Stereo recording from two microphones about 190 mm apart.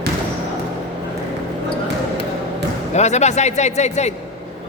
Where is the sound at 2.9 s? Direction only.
35° left (ahead or behind).